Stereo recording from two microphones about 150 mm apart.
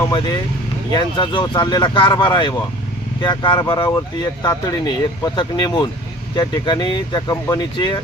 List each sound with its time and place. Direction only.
0.1 s speech: 30° left (ahead or behind)